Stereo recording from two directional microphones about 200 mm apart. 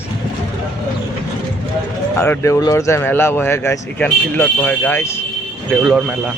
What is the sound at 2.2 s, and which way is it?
Speech, 10° left (ahead or behind).